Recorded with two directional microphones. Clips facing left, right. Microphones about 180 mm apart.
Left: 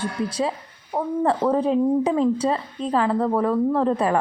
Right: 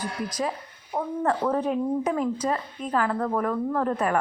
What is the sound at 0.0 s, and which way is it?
A woman's voice, 30° left (ahead or behind).